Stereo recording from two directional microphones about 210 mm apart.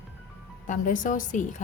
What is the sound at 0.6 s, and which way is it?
A woman's voice, 35° left (ahead or behind).